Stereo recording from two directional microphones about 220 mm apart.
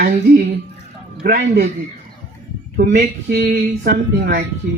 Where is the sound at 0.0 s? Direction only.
35° right (ahead or behind).